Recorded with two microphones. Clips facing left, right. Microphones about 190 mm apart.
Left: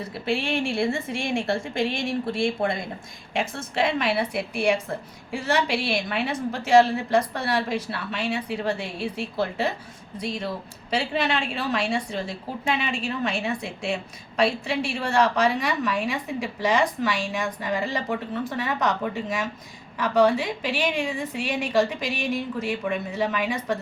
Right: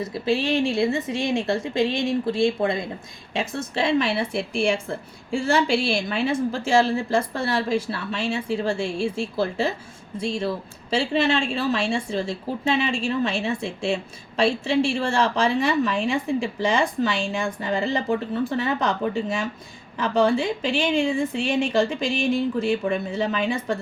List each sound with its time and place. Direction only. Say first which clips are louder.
0.5 s a woman's voice: right 3 dB; 20° right (ahead or behind)